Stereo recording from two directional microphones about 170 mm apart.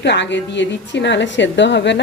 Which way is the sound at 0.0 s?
90° left.